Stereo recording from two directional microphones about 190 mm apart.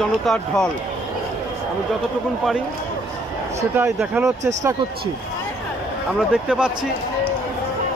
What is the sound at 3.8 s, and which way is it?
Speech, centre (ahead or behind).